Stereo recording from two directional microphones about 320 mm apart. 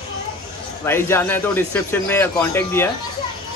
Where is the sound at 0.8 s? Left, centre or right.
Centre.